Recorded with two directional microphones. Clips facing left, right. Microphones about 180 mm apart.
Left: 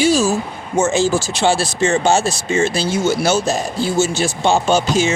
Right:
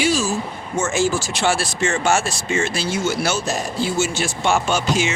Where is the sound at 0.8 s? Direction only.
35° left (ahead or behind).